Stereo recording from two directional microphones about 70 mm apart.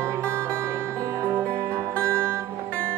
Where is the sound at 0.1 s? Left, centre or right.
Right.